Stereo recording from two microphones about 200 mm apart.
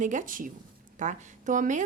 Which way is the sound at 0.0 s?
40° right (ahead or behind).